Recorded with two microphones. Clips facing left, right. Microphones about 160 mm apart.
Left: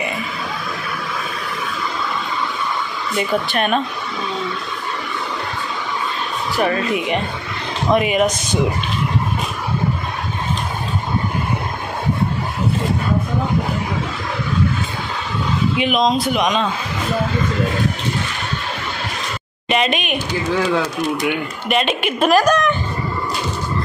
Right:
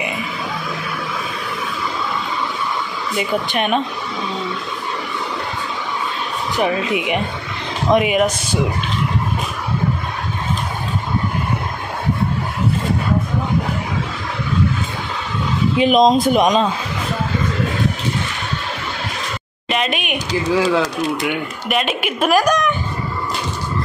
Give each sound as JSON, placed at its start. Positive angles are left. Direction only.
{"t": 3.2, "sound": "speech", "side_deg": -15}
{"t": 6.5, "sound": "speech", "side_deg": -10}
{"t": 15.8, "sound": "speech", "side_deg": -40}
{"t": 19.7, "sound": "speech", "side_deg": -5}